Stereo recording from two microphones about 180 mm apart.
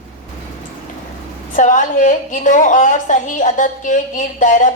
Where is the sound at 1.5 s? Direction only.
45° left (ahead or behind).